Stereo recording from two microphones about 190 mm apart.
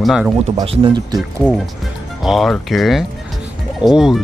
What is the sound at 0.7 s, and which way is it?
Speech, 30° right (ahead or behind).